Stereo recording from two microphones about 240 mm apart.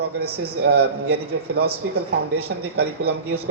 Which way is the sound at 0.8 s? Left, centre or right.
Right.